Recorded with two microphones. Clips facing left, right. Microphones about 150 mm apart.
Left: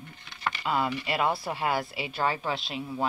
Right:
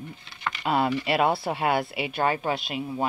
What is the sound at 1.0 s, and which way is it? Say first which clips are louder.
Speech: right 5 dB; 65° right (ahead or behind).